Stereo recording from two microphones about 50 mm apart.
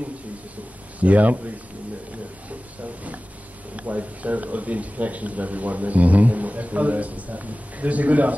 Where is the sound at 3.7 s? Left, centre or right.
Right.